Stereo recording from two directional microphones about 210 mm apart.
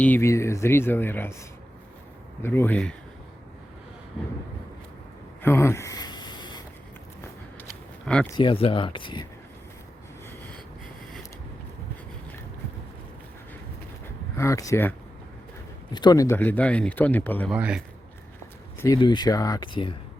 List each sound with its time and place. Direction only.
0.0 s a man's voice: 10° left (ahead or behind)
5.4 s a sound: 10° left (ahead or behind)
8.0 s speech: 5° left (ahead or behind)
8.4 s speech: 25° left (ahead or behind)
14.3 s a man's voice: 15° left (ahead or behind)
17.5 s a man's voice: 5° right (ahead or behind)
18.8 s speech: 20° left (ahead or behind)